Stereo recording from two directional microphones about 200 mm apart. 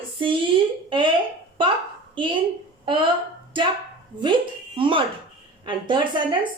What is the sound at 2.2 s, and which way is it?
Speech, 25° right (ahead or behind).